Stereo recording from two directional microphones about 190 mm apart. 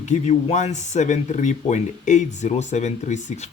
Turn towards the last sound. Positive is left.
turn(degrees=40)  # may be behind; listen again after turning